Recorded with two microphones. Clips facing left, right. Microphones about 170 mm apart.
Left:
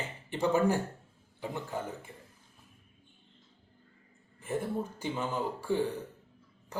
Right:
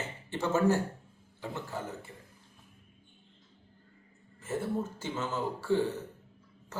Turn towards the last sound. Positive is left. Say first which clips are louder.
# right 2 dB
turn(degrees=15)  # may be behind; listen again after turning